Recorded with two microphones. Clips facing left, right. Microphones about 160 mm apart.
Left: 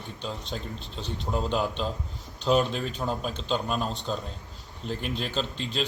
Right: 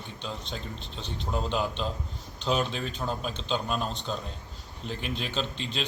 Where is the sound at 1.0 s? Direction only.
40° left (ahead or behind).